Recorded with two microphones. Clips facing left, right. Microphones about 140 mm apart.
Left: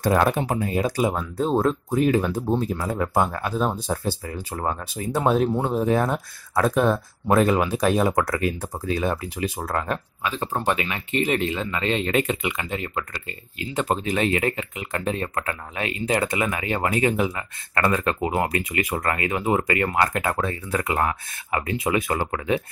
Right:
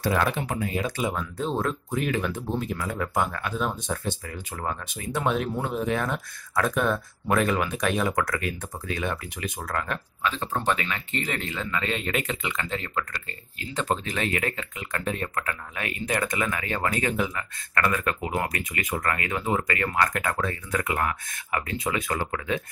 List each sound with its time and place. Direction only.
0.0 s speech: 45° left (ahead or behind)
0.4 s speech: 35° left (ahead or behind)
10.2 s speech: 15° left (ahead or behind)